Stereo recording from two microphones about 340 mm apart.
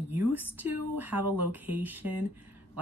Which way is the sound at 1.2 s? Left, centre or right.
Right.